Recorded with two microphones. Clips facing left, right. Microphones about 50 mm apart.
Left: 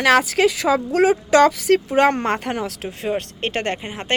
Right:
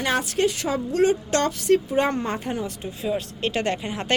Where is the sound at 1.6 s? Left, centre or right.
Left.